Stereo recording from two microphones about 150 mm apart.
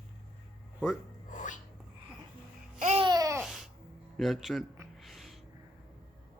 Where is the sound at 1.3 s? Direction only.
55° left (ahead or behind).